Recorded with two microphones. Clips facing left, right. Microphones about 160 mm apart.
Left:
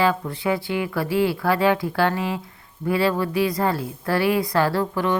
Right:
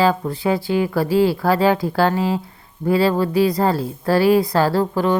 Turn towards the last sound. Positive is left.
turn(degrees=-30)  # may be behind; listen again after turning